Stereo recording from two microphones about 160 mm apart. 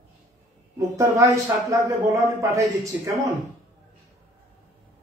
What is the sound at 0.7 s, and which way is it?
A woman's voice, 20° right (ahead or behind).